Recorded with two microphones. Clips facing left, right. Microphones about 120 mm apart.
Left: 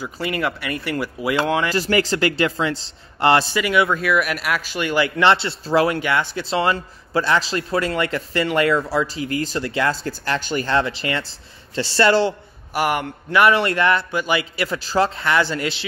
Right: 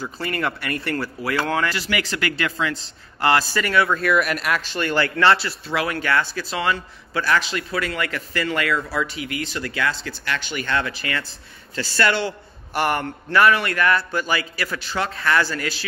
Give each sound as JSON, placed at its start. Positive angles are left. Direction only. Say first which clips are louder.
{"t": 0.0, "sound": "speech", "louder": "left 2 dB", "side_deg": 10}
{"t": 1.7, "sound": "a man's voice", "louder": "left 6 dB", "side_deg": 40}
{"t": 3.5, "sound": "speech", "louder": "left 2 dB", "side_deg": 15}
{"t": 5.9, "sound": "a man's voice", "louder": "left 1 dB", "side_deg": 20}
{"t": 9.6, "sound": "a man's voice", "louder": "left 3 dB", "side_deg": 25}
{"t": 9.8, "sound": "a man's voice", "louder": "left 4 dB", "side_deg": 40}
{"t": 12.7, "sound": "speech", "louder": "left 1 dB", "side_deg": 10}
{"t": 13.5, "sound": "a man's voice", "louder": "left 2 dB", "side_deg": 25}